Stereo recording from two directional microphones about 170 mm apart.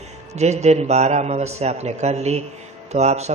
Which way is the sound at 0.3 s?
40° right (ahead or behind).